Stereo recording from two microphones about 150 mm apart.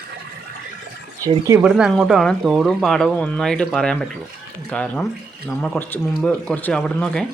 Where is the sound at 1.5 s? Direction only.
15° right (ahead or behind).